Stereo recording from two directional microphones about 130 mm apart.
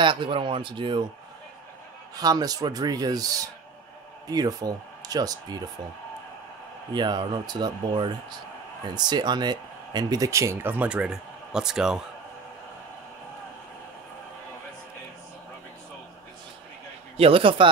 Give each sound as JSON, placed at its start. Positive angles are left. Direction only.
{"t": 0.0, "sound": "speech", "side_deg": -40}
{"t": 2.1, "sound": "speech", "side_deg": -30}
{"t": 6.9, "sound": "speech", "side_deg": -35}
{"t": 17.2, "sound": "speech", "side_deg": -45}